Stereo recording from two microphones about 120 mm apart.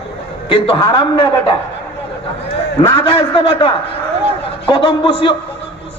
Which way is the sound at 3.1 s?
45° left (ahead or behind).